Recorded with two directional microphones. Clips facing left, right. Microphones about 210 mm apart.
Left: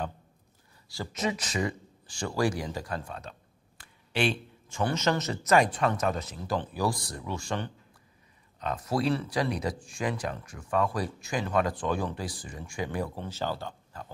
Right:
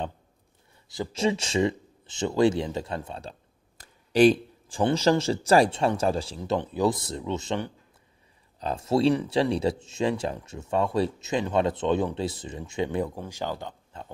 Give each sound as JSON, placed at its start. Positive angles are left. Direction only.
{"t": 0.8, "sound": "speech", "side_deg": -25}
{"t": 8.5, "sound": "speech", "side_deg": -30}